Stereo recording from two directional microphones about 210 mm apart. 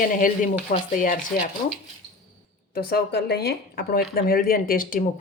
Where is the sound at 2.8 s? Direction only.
50° left (ahead or behind).